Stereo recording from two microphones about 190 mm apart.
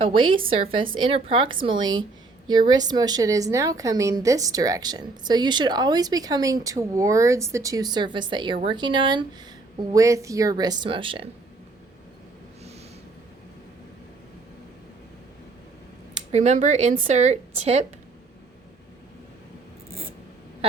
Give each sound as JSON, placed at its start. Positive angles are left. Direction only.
{"t": 0.0, "sound": "a woman's voice", "side_deg": -25}
{"t": 16.3, "sound": "a woman's voice", "side_deg": -35}